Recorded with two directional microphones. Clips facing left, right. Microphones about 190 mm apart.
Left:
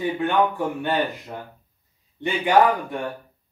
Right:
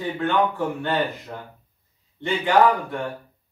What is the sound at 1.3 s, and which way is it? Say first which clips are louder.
A man's voice: left 1 dB; 15° left (ahead or behind).